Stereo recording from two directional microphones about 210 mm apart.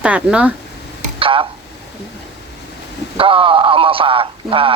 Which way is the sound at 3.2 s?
25° right (ahead or behind).